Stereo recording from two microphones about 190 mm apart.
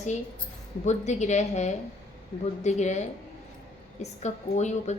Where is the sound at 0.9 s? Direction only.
35° left (ahead or behind).